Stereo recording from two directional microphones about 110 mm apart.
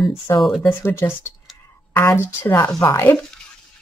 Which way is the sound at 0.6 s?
25° left (ahead or behind).